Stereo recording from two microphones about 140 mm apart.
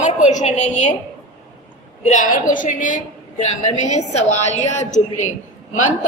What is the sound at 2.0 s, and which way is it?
A woman's voice, 65° left (ahead or behind).